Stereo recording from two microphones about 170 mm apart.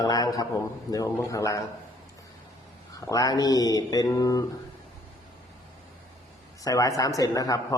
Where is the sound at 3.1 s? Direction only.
20° left (ahead or behind).